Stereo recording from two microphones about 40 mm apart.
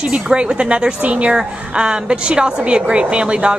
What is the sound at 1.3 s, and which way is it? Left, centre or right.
Speech, right.